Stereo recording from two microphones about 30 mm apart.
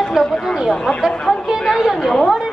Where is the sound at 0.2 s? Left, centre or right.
Centre.